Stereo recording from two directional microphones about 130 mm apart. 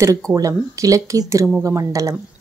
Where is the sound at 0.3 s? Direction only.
25° right (ahead or behind).